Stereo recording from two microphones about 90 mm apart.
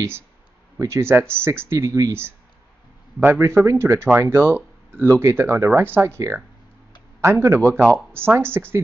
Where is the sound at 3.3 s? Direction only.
30° right (ahead or behind).